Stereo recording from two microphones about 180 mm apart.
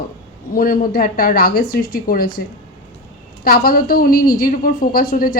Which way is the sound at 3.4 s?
55° left (ahead or behind).